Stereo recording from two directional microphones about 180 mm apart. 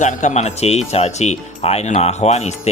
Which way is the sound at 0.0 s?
45° left (ahead or behind).